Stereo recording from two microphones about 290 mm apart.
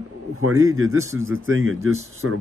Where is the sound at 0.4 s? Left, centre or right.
Right.